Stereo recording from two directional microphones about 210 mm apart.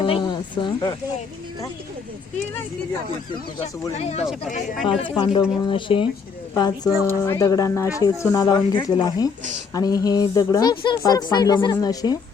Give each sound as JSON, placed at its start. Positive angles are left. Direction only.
{"t": 0.1, "sound": "speech", "side_deg": 20}
{"t": 3.9, "sound": "speech", "side_deg": 30}
{"t": 6.5, "sound": "speech", "side_deg": 15}